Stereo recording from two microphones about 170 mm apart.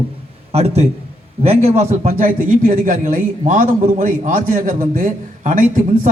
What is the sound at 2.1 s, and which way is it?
A man's voice, 50° right (ahead or behind).